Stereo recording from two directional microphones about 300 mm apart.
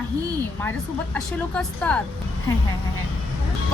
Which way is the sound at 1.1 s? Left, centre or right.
Centre.